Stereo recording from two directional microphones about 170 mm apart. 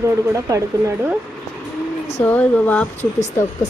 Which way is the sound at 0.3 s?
20° right (ahead or behind).